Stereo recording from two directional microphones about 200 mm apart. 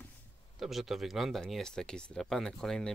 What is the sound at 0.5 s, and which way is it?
Speech, centre (ahead or behind).